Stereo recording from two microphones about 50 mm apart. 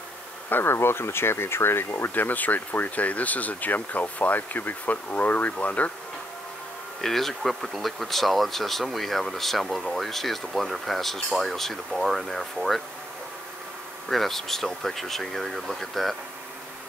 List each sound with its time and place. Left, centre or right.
0.5 s speech: left
2.0 s speech: left
7.0 s speech: centre
14.0 s speech: centre